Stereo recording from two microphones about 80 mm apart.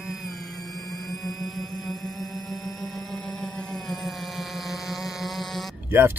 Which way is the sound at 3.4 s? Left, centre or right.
Centre.